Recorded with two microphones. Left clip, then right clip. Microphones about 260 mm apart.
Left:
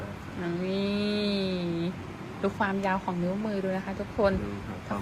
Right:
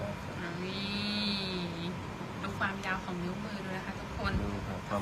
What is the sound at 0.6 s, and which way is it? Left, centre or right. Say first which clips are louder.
Vehicle: left 6 dB; centre.